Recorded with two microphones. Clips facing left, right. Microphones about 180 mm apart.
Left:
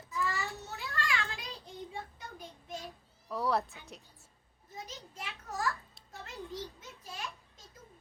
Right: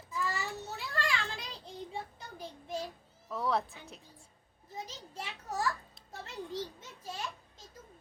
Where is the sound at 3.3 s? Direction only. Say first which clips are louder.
Left 1 dB; centre (ahead or behind).